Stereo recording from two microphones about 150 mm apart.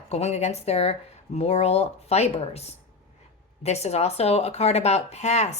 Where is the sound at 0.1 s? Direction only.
45° left (ahead or behind).